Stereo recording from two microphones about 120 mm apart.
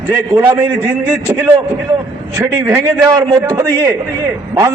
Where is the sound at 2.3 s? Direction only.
25° right (ahead or behind).